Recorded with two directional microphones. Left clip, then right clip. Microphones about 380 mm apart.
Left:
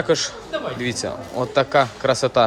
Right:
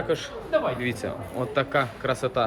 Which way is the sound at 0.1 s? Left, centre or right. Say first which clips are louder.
Left 2 dB; centre.